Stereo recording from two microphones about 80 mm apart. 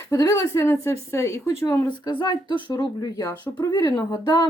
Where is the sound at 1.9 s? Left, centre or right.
Left.